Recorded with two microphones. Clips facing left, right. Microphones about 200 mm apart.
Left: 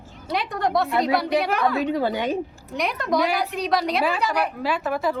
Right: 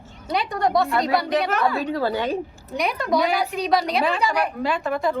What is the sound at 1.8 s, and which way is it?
Speech, 15° left (ahead or behind).